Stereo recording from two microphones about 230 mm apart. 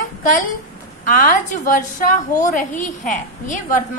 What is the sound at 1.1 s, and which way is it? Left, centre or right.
A woman's voice, left.